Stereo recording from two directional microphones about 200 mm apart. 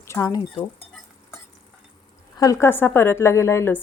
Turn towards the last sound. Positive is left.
turn(degrees=10)  # may be behind; listen again after turning